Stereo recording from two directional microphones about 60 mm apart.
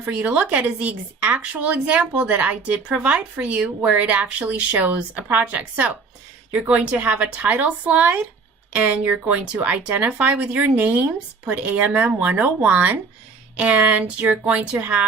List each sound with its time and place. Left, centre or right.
0.2 s speech: right